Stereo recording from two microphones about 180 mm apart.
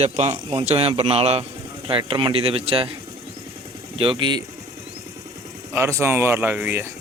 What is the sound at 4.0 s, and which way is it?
Speech, 30° right (ahead or behind).